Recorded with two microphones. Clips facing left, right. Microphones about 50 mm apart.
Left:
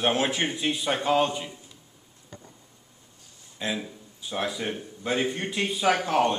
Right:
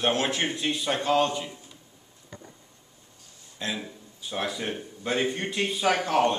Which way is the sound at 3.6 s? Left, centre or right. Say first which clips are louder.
Left 2 dB; centre.